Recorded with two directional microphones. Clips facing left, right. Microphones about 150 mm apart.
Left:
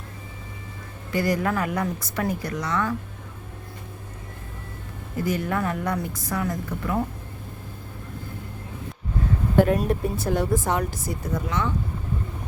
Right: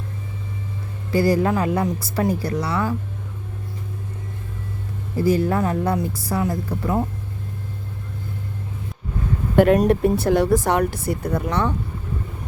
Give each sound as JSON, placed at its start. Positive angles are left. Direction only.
{"t": 1.1, "sound": "a woman's voice", "side_deg": -30}
{"t": 5.1, "sound": "a woman's voice", "side_deg": -30}
{"t": 9.6, "sound": "speech", "side_deg": -80}